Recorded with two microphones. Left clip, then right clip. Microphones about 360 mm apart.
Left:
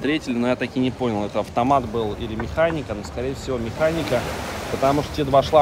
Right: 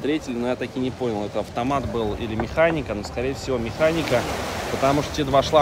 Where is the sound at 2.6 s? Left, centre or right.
Centre.